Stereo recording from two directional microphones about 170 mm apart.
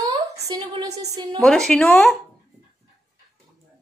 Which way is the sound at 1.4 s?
5° left (ahead or behind).